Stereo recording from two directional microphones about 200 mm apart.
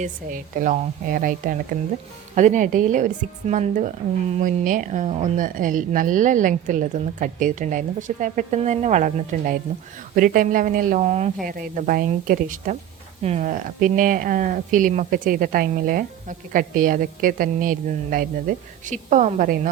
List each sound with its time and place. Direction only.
0.0 s a woman's voice: 40° right (ahead or behind)
11.4 s a woman's voice: 45° right (ahead or behind)